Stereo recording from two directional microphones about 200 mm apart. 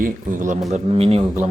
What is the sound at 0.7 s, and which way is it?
Speech, 30° right (ahead or behind).